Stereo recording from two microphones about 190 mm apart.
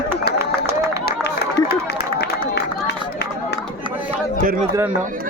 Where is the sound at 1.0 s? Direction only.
60° left (ahead or behind).